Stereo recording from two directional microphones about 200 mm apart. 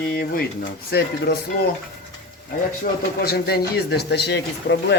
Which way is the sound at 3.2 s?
55° left (ahead or behind).